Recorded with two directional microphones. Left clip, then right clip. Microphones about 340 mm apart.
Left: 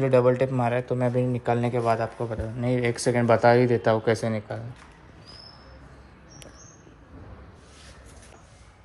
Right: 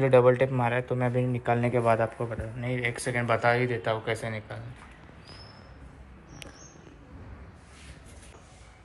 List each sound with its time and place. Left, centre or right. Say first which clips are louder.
0.0 s a man's voice: even; centre
2.6 s speech: left 6 dB; left